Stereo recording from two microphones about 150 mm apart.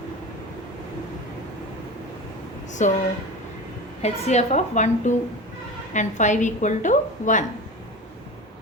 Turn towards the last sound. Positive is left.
turn(degrees=55)  # may be behind; listen again after turning